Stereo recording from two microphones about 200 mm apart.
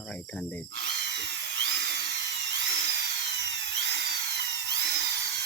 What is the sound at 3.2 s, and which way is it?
Tools, 60° right (ahead or behind).